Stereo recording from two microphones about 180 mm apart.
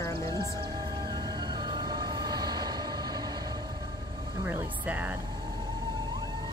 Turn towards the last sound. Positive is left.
turn(degrees=-10)  # may be behind; listen again after turning